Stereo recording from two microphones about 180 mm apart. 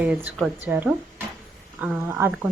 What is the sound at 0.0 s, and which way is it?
Speech, 10° right (ahead or behind).